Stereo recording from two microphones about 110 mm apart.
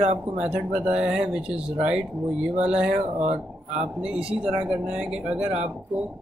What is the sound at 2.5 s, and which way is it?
Speech, 80° right.